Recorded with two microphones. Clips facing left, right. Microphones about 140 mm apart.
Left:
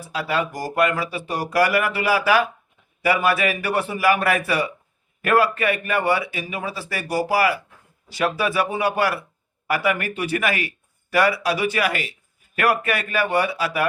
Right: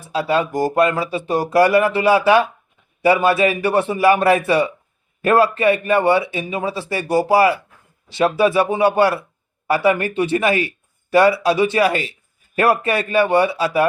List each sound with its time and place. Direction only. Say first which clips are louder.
0.1 s speech: right 6 dB; 25° right (ahead or behind)